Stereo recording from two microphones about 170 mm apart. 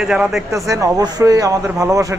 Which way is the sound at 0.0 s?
5° right (ahead or behind).